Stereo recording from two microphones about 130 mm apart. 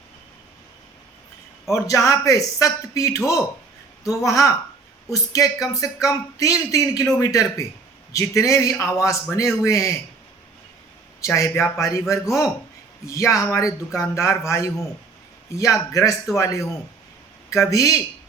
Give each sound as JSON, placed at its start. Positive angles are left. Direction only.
{"t": 1.7, "sound": "a man's voice", "side_deg": 25}
{"t": 4.3, "sound": "a man's voice", "side_deg": 25}
{"t": 11.2, "sound": "a man's voice", "side_deg": 25}